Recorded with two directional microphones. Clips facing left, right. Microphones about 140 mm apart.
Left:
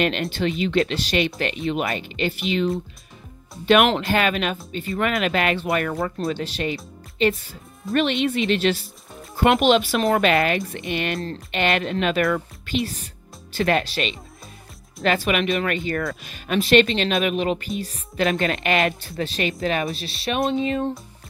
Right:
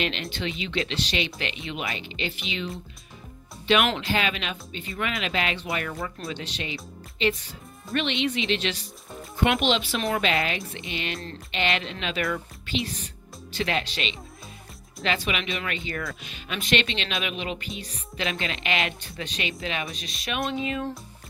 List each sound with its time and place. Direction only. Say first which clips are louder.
0.0 s speech: left 7 dB; 50° left (ahead or behind)
4.0 s speech: left 6 dB; 50° left (ahead or behind)
6.2 s speech: left 9 dB; 40° left (ahead or behind)